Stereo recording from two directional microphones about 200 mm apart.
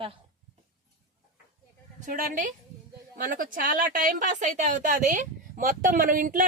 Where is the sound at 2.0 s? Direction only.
40° right (ahead or behind).